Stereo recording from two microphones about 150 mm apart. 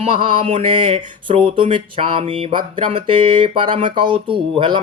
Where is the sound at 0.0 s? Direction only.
35° right (ahead or behind).